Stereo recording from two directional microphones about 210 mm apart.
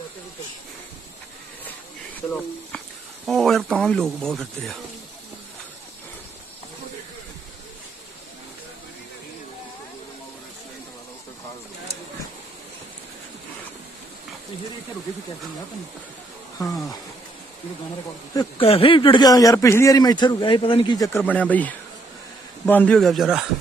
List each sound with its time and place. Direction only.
3.2 s speech: centre (ahead or behind)
16.6 s speech: 15° left (ahead or behind)
18.3 s a man's voice: 25° left (ahead or behind); by 23.4 s centre (ahead or behind)